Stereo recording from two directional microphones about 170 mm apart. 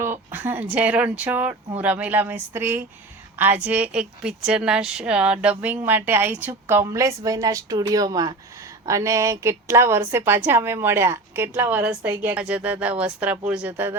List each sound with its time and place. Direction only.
0.3 s a woman's voice: 10° right (ahead or behind)